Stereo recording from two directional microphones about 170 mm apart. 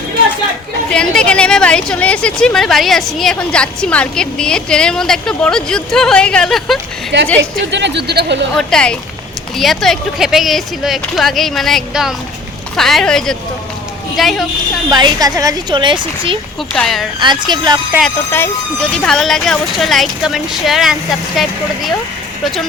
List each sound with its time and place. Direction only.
0.9 s speech: 5° left (ahead or behind)
7.1 s speech: 90° right
8.5 s speech: 5° left (ahead or behind)
14.8 s speech: 25° right (ahead or behind)
16.7 s speech: centre (ahead or behind)
17.2 s speech: 25° right (ahead or behind)
18.3 s speech: 15° left (ahead or behind)